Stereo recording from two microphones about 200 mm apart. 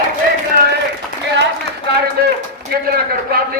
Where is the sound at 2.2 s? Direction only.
50° right (ahead or behind).